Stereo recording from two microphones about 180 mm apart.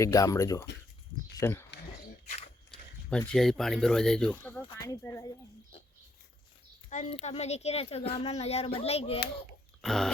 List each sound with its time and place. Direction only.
0.0 s speech: 20° left (ahead or behind)
3.1 s speech: 5° left (ahead or behind)
4.8 s speech: 15° left (ahead or behind)
6.9 s speech: 40° left (ahead or behind)
9.8 s dog: centre (ahead or behind)